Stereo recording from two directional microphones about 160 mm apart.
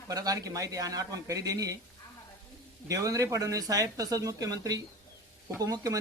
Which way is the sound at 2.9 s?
20° right (ahead or behind).